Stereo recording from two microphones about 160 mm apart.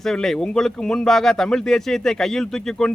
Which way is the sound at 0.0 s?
Centre (ahead or behind).